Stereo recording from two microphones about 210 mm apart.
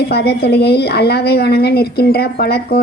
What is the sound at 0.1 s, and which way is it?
A woman's voice, 50° left (ahead or behind).